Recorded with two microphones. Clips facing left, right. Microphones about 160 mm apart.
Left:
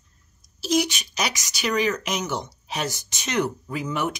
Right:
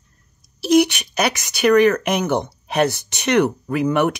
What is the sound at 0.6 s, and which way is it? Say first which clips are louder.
Speech: right 8 dB; 65° right (ahead or behind).